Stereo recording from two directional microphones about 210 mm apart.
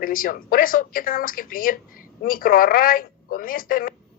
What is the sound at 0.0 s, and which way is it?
A woman's voice, 40° left (ahead or behind).